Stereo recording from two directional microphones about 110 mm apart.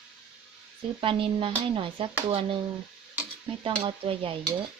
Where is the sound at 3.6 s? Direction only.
55° right (ahead or behind).